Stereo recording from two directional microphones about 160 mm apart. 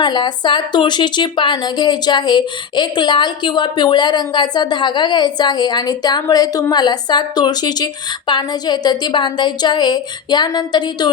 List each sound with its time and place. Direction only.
0.0 s speech: 30° left (ahead or behind)